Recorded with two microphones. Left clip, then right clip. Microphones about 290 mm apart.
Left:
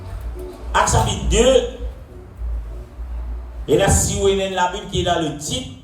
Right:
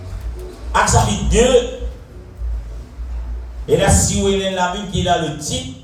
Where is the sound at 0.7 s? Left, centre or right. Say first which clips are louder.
Right 2 dB; left.